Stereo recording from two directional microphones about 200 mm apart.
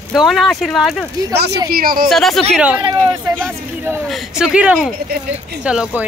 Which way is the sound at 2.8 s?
20° right (ahead or behind).